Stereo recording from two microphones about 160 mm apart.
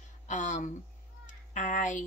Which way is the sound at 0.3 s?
50° left (ahead or behind).